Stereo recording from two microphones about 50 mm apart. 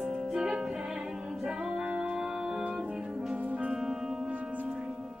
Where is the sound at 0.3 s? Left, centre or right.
Centre.